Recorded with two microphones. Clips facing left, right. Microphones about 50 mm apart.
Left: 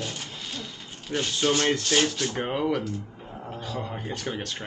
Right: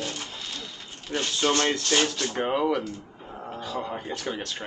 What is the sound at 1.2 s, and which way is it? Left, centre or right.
Speech, centre.